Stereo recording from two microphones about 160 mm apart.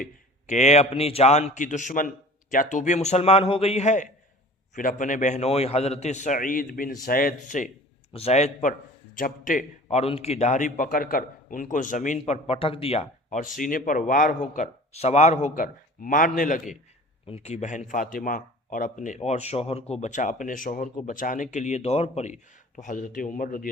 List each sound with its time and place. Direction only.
0.0 s a man's voice: 50° left (ahead or behind)
8.1 s a man's voice: 40° left (ahead or behind)
9.1 s a man's voice: 60° left (ahead or behind)
10.0 s a man's voice: 40° left (ahead or behind)
13.6 s speech: 60° left (ahead or behind)
17.2 s a man's voice: 40° left (ahead or behind); by 23.6 s 60° left (ahead or behind)